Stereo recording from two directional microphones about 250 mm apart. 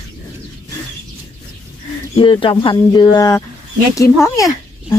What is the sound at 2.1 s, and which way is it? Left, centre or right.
A child's voice, left.